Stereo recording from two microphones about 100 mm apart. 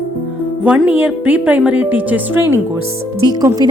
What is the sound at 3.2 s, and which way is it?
Speech, 40° right (ahead or behind).